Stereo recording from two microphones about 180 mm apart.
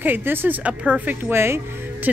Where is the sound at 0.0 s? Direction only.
10° right (ahead or behind).